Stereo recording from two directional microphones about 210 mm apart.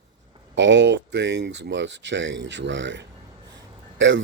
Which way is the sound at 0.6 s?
55° right (ahead or behind).